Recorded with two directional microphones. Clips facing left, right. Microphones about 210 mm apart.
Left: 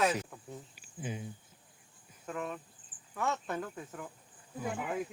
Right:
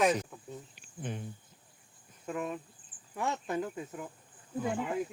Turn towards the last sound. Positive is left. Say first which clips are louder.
# right 4 dB
turn(degrees=5)  # may be behind; listen again after turning